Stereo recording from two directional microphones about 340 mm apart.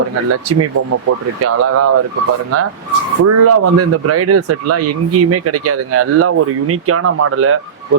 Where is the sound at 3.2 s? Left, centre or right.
Right.